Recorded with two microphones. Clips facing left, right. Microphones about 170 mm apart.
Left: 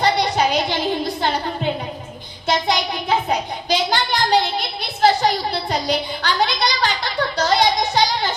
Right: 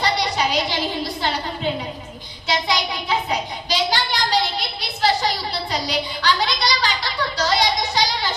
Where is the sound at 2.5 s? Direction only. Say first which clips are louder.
Left 3 dB; 50° left (ahead or behind).